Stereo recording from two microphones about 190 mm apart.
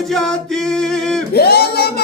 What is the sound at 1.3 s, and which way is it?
Singing, 55° left (ahead or behind).